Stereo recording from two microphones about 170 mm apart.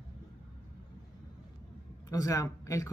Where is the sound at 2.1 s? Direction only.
20° left (ahead or behind).